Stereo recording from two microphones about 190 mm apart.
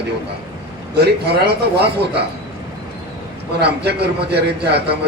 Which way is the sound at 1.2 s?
60° right (ahead or behind).